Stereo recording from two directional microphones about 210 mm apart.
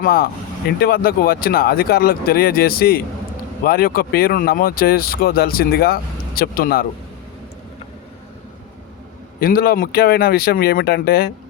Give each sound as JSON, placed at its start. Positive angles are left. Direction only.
{"t": 0.0, "sound": "speech", "side_deg": 45}
{"t": 9.4, "sound": "speech", "side_deg": 45}